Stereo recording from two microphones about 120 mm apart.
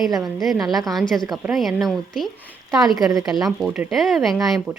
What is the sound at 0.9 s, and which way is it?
Speech, centre (ahead or behind).